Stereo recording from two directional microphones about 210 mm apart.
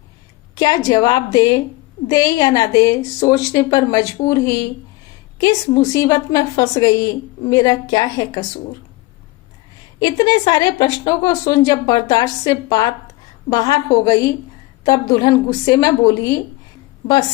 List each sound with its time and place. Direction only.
0.5 s a woman's voice: 20° left (ahead or behind)
10.0 s a woman's voice: 20° left (ahead or behind)